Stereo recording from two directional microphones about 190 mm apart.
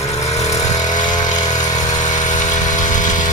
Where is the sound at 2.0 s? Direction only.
40° left (ahead or behind).